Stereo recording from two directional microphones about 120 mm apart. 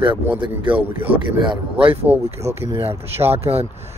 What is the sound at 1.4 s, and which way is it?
Speech, 45° right (ahead or behind).